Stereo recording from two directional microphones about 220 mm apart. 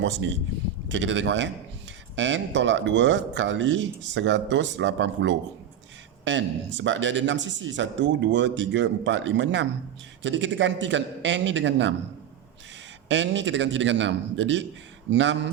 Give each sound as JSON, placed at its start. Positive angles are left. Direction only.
{"t": 0.0, "sound": "speech", "side_deg": -55}
{"t": 13.1, "sound": "speech", "side_deg": -55}